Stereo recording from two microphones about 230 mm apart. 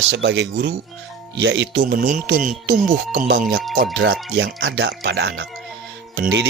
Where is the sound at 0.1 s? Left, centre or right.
Right.